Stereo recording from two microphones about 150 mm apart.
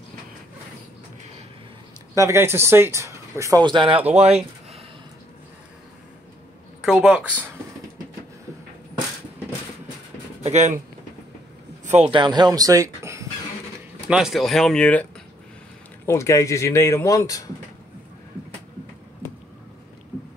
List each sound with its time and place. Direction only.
2.1 s speech: 20° right (ahead or behind)
3.6 s speech: 30° right (ahead or behind)
6.8 s speech: 5° right (ahead or behind)
10.4 s speech: 50° right (ahead or behind)
11.8 s a sound: 50° right (ahead or behind)
12.1 s speech: 30° right (ahead or behind)
14.0 s speech: 5° right (ahead or behind)
16.1 s speech: 20° left (ahead or behind)